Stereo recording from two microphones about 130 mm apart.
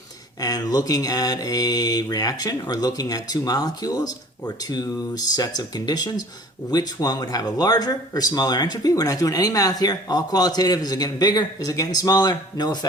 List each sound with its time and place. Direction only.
0.3 s mantra: 30° left (ahead or behind)
6.7 s speech: 30° left (ahead or behind)